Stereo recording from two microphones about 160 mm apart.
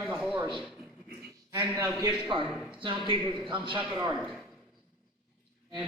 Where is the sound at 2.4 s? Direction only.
Centre (ahead or behind).